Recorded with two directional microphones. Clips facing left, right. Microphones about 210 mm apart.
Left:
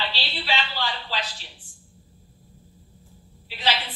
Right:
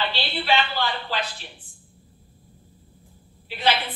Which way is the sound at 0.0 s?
55° right (ahead or behind).